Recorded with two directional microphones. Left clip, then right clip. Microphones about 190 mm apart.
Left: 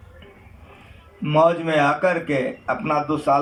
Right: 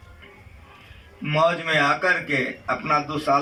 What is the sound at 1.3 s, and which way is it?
Speech, 15° left (ahead or behind).